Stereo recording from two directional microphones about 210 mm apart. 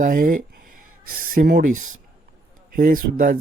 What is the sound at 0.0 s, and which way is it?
Speech, 40° right (ahead or behind).